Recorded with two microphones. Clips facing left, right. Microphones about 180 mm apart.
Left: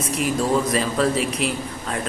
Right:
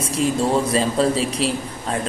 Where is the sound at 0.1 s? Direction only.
30° right (ahead or behind).